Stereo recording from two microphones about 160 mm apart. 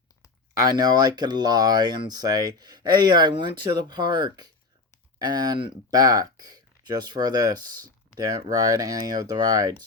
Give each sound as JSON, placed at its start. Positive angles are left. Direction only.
{"t": 0.7, "sound": "speech", "side_deg": -25}